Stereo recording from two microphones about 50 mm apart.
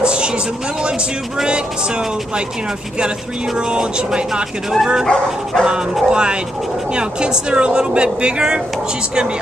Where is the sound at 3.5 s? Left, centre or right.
Centre.